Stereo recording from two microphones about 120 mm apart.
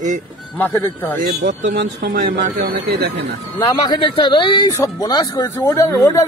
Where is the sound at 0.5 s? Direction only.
15° left (ahead or behind).